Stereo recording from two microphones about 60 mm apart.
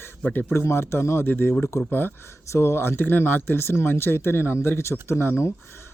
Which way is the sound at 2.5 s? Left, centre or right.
Left.